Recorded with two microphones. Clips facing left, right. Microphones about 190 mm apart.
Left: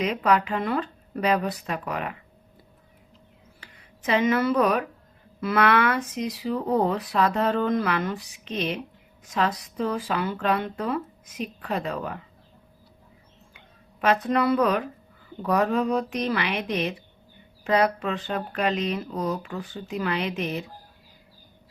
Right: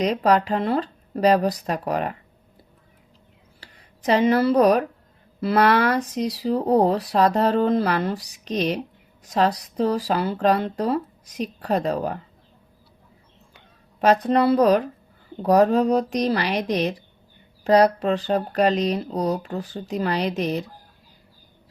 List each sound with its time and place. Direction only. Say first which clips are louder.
0.0 s speech: right 4 dB; 35° right (ahead or behind)
3.6 s speech: right 6 dB; 35° right (ahead or behind)
14.0 s speech: right 4 dB; 35° right (ahead or behind)